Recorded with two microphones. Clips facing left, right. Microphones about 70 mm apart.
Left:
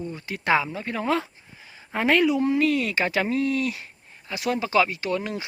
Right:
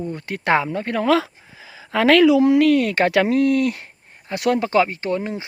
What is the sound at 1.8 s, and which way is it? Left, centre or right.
Speech, right.